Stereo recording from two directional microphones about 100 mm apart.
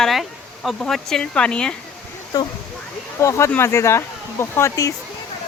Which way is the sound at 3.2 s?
30° left (ahead or behind).